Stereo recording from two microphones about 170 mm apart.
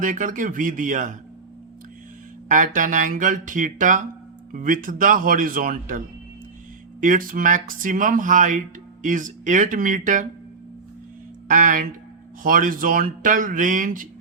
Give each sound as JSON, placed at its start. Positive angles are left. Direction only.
{"t": 0.0, "sound": "speech", "side_deg": -50}
{"t": 2.5, "sound": "speech", "side_deg": -50}
{"t": 7.0, "sound": "speech", "side_deg": -50}
{"t": 11.4, "sound": "speech", "side_deg": -55}